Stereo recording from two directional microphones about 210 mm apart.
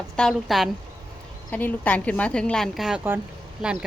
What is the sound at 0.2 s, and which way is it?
A woman's voice, centre (ahead or behind).